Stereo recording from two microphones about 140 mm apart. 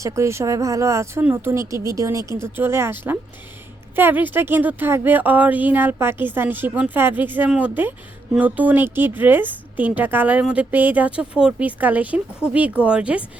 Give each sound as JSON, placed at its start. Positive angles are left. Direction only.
{"t": 0.0, "sound": "speech", "side_deg": -20}